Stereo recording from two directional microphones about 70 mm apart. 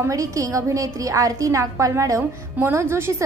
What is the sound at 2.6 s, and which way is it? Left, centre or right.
Speech, right.